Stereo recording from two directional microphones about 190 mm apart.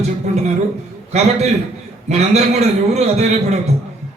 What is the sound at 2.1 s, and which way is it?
A man's voice, 35° right (ahead or behind).